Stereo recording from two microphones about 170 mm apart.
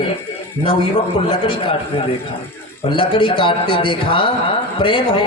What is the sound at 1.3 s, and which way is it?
Speech, 30° left (ahead or behind).